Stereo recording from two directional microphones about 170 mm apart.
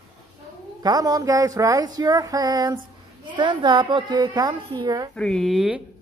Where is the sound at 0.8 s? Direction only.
20° right (ahead or behind).